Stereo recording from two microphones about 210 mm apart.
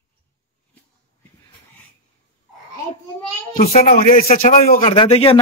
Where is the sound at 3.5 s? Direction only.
45° left (ahead or behind).